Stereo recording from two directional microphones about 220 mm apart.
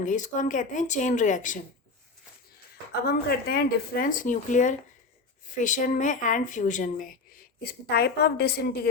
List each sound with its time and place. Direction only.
0.0 s speech: 35° left (ahead or behind)
3.1 s a woman's voice: 45° left (ahead or behind)